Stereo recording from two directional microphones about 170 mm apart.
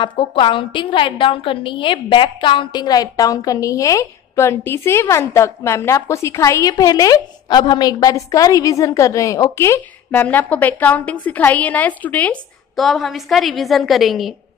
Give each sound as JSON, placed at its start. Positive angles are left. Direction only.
{"t": 0.0, "sound": "a woman's voice", "side_deg": 30}